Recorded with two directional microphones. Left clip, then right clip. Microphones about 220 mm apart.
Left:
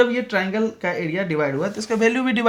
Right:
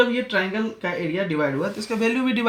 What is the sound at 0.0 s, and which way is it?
Speech, 45° left (ahead or behind).